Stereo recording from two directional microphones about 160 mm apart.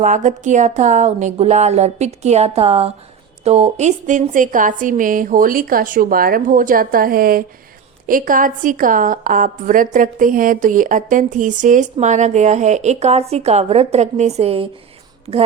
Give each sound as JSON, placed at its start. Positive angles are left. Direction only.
{"t": 0.0, "sound": "a woman's voice", "side_deg": -50}